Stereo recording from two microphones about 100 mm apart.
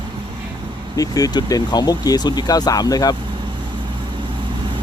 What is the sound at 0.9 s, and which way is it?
Speech, 35° left (ahead or behind).